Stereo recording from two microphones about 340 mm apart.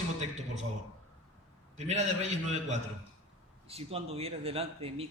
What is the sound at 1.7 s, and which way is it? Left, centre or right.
A man's voice, centre.